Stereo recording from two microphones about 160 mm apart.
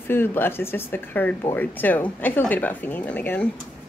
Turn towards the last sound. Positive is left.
turn(degrees=10)  # may be behind; listen again after turning